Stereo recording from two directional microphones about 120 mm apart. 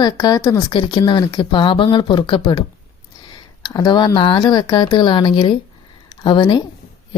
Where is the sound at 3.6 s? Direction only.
35° left (ahead or behind).